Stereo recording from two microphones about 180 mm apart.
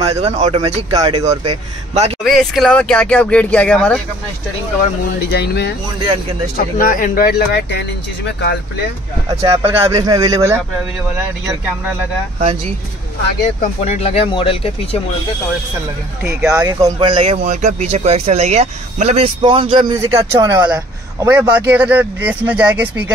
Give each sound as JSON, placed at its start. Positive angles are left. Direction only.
{"t": 0.2, "sound": "speech", "side_deg": -35}
{"t": 1.5, "sound": "speech", "side_deg": -35}
{"t": 2.2, "sound": "speech", "side_deg": 0}
{"t": 5.3, "sound": "speech", "side_deg": 65}
{"t": 6.5, "sound": "speech", "side_deg": 50}
{"t": 9.3, "sound": "speech", "side_deg": -15}
{"t": 13.6, "sound": "speech", "side_deg": 40}
{"t": 16.5, "sound": "speech", "side_deg": -20}